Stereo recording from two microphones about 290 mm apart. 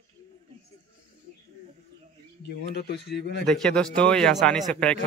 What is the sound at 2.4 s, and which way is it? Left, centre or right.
Speech, left.